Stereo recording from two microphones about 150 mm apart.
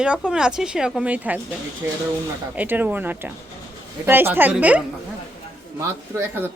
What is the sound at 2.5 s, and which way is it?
Speech, 10° right (ahead or behind).